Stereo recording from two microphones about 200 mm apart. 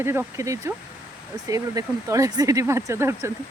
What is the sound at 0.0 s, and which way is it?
Speech, 10° right (ahead or behind).